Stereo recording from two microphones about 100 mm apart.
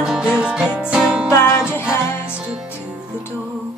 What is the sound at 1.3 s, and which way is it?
Music, 25° left (ahead or behind).